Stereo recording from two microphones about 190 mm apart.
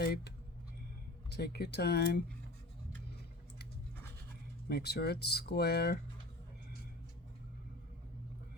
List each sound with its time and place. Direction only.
1.4 s speech: 55° left (ahead or behind)
4.7 s speech: 55° left (ahead or behind)